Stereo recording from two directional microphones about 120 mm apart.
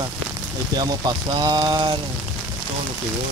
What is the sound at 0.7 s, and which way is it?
Speech, 35° right (ahead or behind).